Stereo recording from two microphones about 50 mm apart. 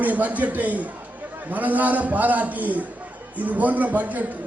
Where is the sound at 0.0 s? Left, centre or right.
Right.